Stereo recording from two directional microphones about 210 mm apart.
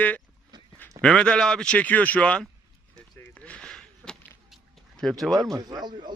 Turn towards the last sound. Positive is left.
turn(degrees=-20)  # may be behind; listen again after turning